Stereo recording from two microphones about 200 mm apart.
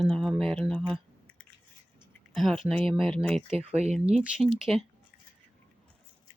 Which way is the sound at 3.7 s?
35° right (ahead or behind).